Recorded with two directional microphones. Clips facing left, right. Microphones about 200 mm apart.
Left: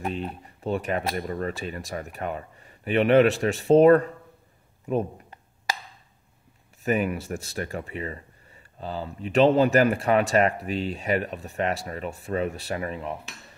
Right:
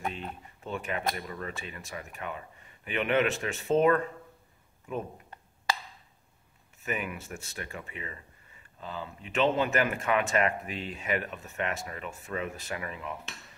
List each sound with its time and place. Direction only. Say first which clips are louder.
0.0 s speech: left 6 dB; 35° left (ahead or behind)
6.8 s speech: left 10 dB; 40° left (ahead or behind)